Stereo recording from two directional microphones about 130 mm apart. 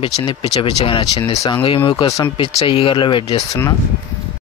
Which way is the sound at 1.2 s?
25° left (ahead or behind).